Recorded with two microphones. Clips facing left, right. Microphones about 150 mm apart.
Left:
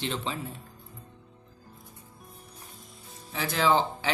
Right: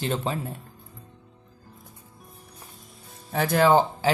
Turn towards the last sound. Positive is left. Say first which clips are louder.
# right 6 dB
turn(degrees=-50)  # may be behind; listen again after turning